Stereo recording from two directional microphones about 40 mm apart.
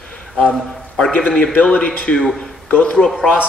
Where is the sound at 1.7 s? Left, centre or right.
Left.